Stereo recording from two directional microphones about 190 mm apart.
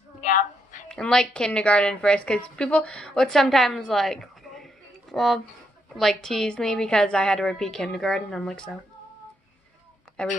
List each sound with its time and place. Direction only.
0.2 s a sound: 45° left (ahead or behind)
0.8 s a woman's voice: 5° left (ahead or behind)
10.2 s a woman's voice: 5° left (ahead or behind)